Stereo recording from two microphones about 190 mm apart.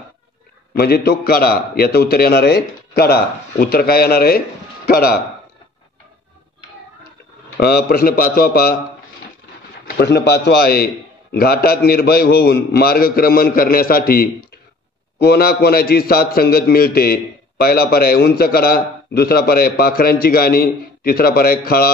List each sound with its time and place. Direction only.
0.7 s a man's voice: 55° left (ahead or behind)
7.5 s a man's voice: 55° left (ahead or behind)
9.8 s a man's voice: 60° left (ahead or behind)